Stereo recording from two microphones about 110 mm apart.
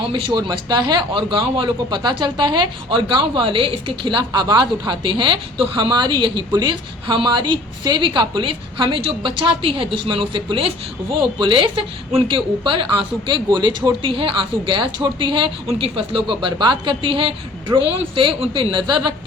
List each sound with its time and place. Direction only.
0.0 s speech: 50° right (ahead or behind)